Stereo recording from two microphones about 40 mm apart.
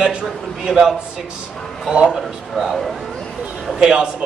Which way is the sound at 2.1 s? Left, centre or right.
Centre.